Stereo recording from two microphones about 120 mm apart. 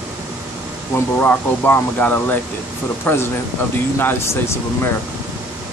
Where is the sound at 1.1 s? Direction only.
15° left (ahead or behind).